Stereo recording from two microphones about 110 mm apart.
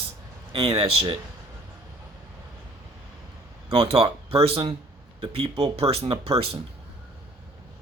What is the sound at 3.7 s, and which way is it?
Speech, 60° right (ahead or behind).